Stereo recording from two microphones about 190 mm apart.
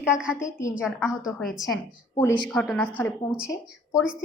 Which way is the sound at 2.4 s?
5° left (ahead or behind).